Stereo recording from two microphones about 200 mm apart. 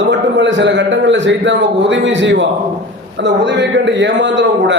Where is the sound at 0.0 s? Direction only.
60° right (ahead or behind).